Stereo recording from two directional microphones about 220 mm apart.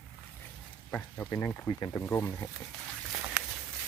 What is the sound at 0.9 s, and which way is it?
Speech, 10° left (ahead or behind).